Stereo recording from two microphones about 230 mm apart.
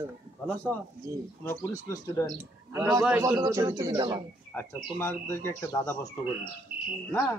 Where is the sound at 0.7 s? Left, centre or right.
Centre.